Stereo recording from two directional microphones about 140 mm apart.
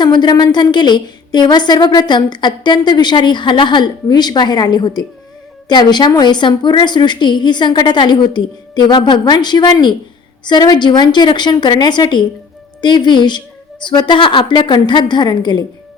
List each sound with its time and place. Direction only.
0.0 s a woman's voice: 30° left (ahead or behind)